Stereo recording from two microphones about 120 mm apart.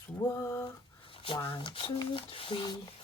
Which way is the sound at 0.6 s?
45° left (ahead or behind).